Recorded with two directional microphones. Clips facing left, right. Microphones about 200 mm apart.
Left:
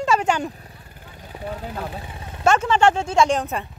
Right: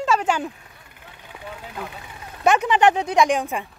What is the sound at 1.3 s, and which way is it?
Speech, 35° left (ahead or behind).